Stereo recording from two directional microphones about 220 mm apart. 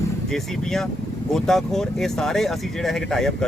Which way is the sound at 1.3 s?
Centre (ahead or behind).